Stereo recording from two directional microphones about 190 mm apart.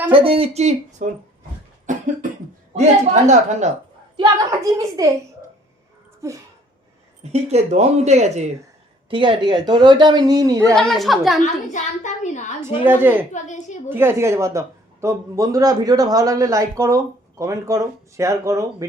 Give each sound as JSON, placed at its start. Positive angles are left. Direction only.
{"t": 0.1, "sound": "speech", "side_deg": -30}
{"t": 1.9, "sound": "cough", "side_deg": -40}
{"t": 2.7, "sound": "speech", "side_deg": -35}
{"t": 4.2, "sound": "speech", "side_deg": -20}
{"t": 6.2, "sound": "a man's voice", "side_deg": -15}
{"t": 7.3, "sound": "speech", "side_deg": -35}
{"t": 10.8, "sound": "a woman's voice", "side_deg": 0}
{"t": 11.7, "sound": "a child's voice", "side_deg": 40}
{"t": 12.6, "sound": "a man's voice", "side_deg": -10}
{"t": 13.3, "sound": "a child's voice", "side_deg": 40}
{"t": 13.9, "sound": "a man's voice", "side_deg": -10}